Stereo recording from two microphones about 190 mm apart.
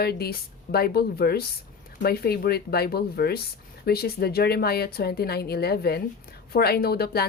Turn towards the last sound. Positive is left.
turn(degrees=55)  # may be behind; listen again after turning